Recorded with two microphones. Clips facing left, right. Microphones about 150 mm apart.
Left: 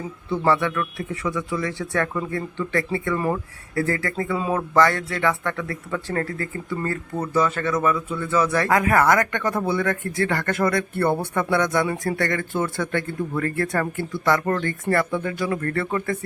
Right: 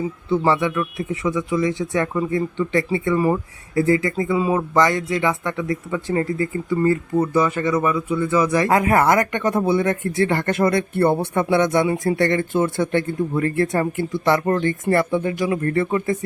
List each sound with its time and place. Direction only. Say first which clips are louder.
0.3 s speech: right 2 dB; 15° right (ahead or behind)